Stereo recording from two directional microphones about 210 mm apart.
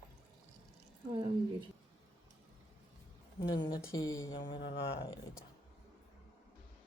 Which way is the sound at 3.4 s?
20° left (ahead or behind).